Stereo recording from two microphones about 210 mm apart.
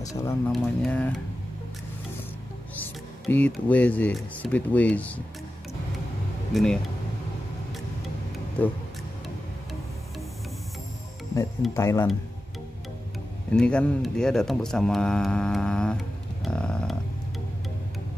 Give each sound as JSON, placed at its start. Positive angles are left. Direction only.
{"t": 0.0, "sound": "speech", "side_deg": 15}
{"t": 0.5, "sound": "speech", "side_deg": 5}
{"t": 2.8, "sound": "speech", "side_deg": 10}
{"t": 6.5, "sound": "speech", "side_deg": 0}
{"t": 8.6, "sound": "speech", "side_deg": 5}
{"t": 11.7, "sound": "speech", "side_deg": 10}
{"t": 13.5, "sound": "speech", "side_deg": 5}